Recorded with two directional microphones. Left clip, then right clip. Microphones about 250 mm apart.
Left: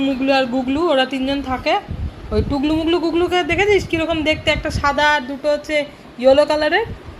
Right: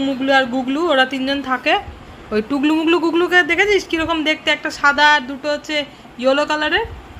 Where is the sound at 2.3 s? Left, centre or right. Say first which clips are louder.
Right 1 dB; right.